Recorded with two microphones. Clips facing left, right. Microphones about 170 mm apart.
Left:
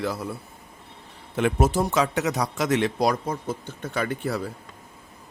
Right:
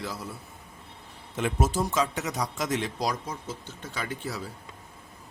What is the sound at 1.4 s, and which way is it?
Speech, 65° left (ahead or behind).